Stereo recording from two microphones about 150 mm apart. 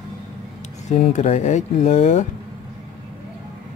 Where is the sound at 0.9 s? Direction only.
50° left (ahead or behind).